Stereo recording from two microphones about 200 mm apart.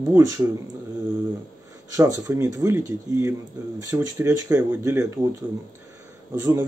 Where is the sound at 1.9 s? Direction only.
15° right (ahead or behind).